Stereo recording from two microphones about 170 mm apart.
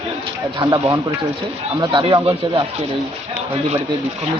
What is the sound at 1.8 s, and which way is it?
Speech, 30° right (ahead or behind).